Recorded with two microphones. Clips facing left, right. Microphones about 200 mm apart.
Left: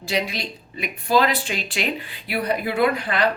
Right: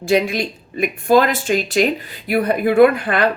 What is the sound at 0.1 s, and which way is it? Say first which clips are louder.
A woman's voice: right 9 dB; 50° right (ahead or behind).